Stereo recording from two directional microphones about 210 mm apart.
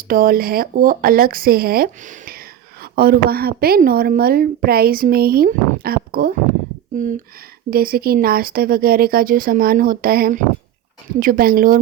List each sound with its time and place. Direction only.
0.1 s speech: 45° right (ahead or behind)